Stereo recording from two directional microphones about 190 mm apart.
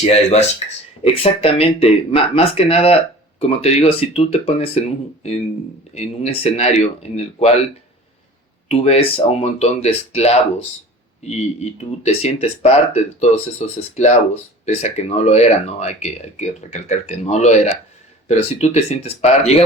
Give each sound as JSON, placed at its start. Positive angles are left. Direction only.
{"t": 0.0, "sound": "speech", "side_deg": 35}
{"t": 8.7, "sound": "speech", "side_deg": 35}